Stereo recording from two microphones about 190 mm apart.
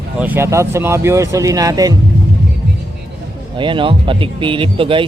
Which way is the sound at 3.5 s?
25° right (ahead or behind).